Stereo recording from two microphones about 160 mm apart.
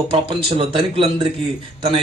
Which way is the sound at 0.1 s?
35° right (ahead or behind).